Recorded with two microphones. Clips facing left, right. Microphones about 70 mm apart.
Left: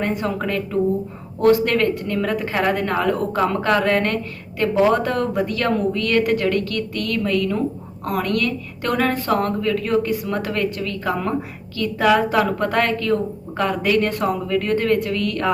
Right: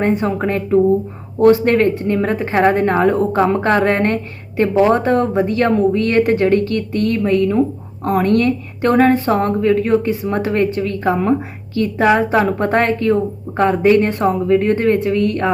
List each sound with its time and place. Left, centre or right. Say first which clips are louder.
0.0 s a woman's voice: right 6 dB; right